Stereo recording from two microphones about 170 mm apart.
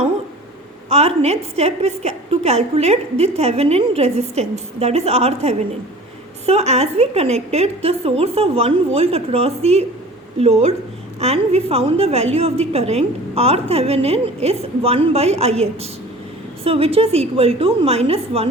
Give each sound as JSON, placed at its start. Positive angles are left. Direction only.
{"t": 0.9, "sound": "a woman's voice", "side_deg": -35}